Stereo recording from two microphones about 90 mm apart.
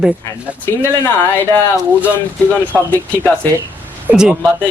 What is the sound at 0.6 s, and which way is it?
Speech, 25° left (ahead or behind).